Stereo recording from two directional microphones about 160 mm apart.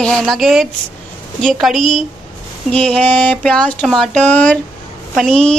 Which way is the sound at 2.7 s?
10° left (ahead or behind).